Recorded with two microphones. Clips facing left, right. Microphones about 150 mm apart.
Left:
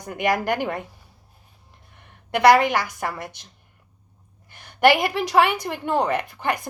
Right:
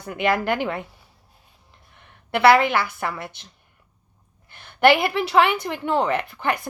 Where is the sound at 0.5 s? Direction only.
50° left (ahead or behind).